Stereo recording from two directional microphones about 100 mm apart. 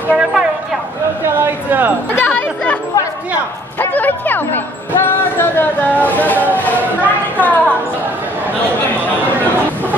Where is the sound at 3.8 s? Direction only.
20° left (ahead or behind).